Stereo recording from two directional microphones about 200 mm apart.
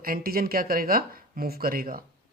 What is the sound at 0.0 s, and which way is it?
Speech, 45° right (ahead or behind).